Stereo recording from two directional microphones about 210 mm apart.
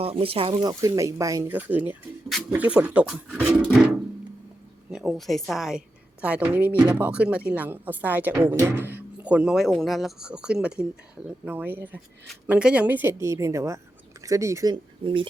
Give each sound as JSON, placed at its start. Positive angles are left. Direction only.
{"t": 0.0, "sound": "a woman's voice", "side_deg": -25}
{"t": 4.9, "sound": "a woman's voice", "side_deg": 0}